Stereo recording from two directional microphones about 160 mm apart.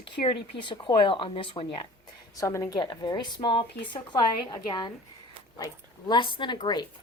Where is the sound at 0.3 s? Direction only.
30° left (ahead or behind).